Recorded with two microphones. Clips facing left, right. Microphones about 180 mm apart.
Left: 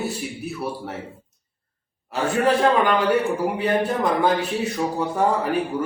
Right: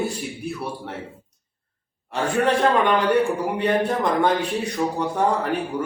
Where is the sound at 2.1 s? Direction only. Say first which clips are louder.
Left 1 dB; 5° left (ahead or behind).